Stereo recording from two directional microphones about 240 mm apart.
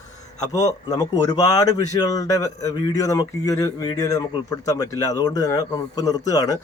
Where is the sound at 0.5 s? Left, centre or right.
Centre.